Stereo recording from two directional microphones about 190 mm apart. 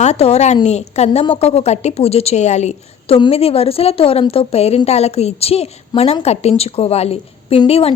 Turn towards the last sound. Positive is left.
turn(degrees=30)  # may be behind; listen again after turning